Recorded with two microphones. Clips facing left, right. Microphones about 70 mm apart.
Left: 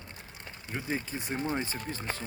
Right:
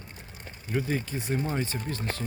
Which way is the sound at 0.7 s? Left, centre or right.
Centre.